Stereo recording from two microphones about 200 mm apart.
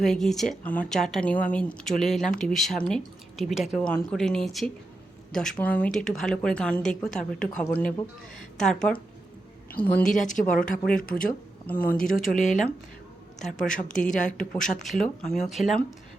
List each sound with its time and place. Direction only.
0.0 s a woman's voice: centre (ahead or behind)
10.1 s speech: 40° left (ahead or behind)
10.4 s speech: 5° left (ahead or behind)
12.3 s speech: 40° left (ahead or behind)
13.4 s speech: centre (ahead or behind)
13.7 s speech: 40° left (ahead or behind)
14.7 s speech: centre (ahead or behind)